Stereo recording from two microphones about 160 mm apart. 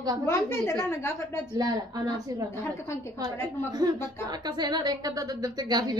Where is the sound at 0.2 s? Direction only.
15° left (ahead or behind).